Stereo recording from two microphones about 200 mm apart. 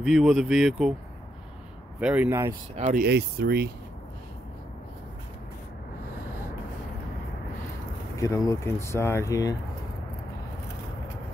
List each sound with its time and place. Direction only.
0.0 s speech: centre (ahead or behind)
2.0 s speech: 5° right (ahead or behind)
2.7 s speech: 40° right (ahead or behind)
3.1 s speech: 55° right (ahead or behind)
8.2 s speech: 15° left (ahead or behind)